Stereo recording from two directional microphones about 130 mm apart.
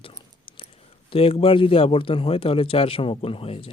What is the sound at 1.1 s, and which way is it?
A man's voice, 45° left (ahead or behind).